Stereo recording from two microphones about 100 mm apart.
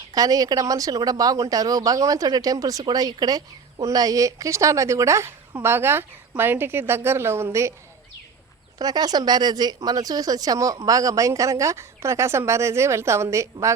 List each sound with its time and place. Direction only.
0.1 s a woman's voice: 40° right (ahead or behind)
8.8 s speech: 40° right (ahead or behind)